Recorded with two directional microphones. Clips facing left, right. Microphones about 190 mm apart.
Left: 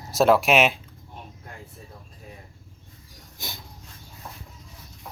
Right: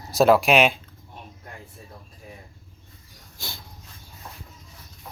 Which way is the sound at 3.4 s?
20° left (ahead or behind).